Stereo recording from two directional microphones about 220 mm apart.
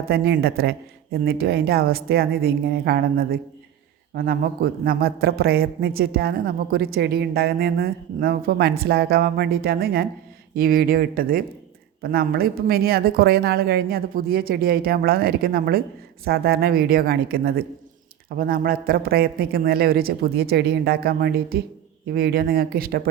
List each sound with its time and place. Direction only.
0.1 s a man's voice: 45° right (ahead or behind)